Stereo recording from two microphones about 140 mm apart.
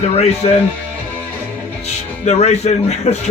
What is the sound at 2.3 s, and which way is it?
Speech, 50° left (ahead or behind).